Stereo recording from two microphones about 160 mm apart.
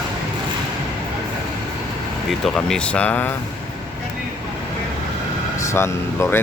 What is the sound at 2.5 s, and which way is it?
Speech, 5° left (ahead or behind).